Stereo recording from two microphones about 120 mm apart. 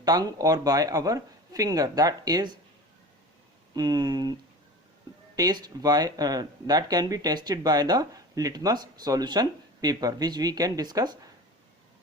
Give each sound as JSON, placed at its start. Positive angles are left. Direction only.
{"t": 0.0, "sound": "speech", "side_deg": -35}
{"t": 3.8, "sound": "speech", "side_deg": -35}
{"t": 5.4, "sound": "speech", "side_deg": -35}